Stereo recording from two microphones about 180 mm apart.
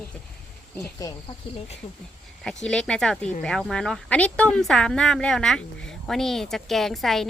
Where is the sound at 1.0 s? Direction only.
20° left (ahead or behind).